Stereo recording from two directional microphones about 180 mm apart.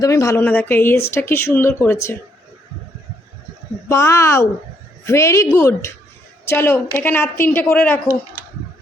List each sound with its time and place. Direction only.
0.0 s speech: 15° left (ahead or behind)
3.8 s a woman's voice: 15° left (ahead or behind)